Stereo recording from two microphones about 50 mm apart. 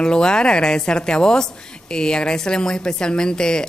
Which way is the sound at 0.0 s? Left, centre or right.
Centre.